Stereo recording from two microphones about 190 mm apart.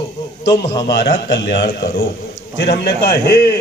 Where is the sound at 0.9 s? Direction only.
55° left (ahead or behind).